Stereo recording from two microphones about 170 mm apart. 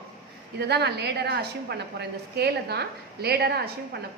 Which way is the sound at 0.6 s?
75° right (ahead or behind).